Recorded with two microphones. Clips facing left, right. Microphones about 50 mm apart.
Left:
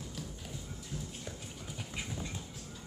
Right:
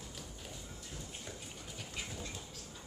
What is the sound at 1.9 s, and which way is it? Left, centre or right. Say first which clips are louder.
Train: left 3 dB; centre.